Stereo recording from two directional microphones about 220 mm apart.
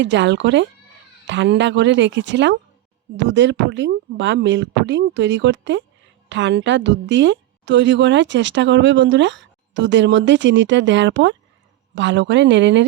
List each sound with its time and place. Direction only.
0.0 s a woman's voice: 55° right (ahead or behind)